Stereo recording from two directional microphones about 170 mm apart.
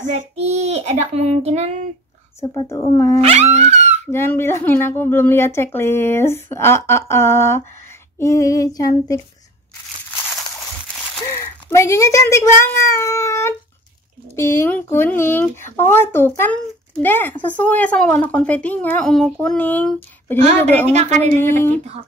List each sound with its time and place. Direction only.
0.0 s child singing: 45° right (ahead or behind)
2.4 s female singing: 25° left (ahead or behind)
2.9 s a woman's voice: 15° left (ahead or behind)
3.2 s a sound: 40° right (ahead or behind)
4.1 s a woman's voice: 15° left (ahead or behind)
8.2 s female singing: 20° left (ahead or behind)
11.2 s a woman's voice: 15° left (ahead or behind)
20.9 s a woman's voice: 40° right (ahead or behind)